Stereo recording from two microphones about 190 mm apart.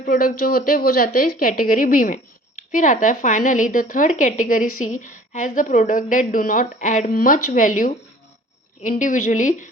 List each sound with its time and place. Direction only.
0.0 s a woman's voice: 45° left (ahead or behind)